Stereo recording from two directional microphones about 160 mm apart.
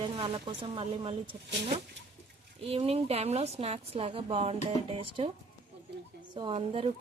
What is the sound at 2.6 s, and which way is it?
Speech, 40° right (ahead or behind).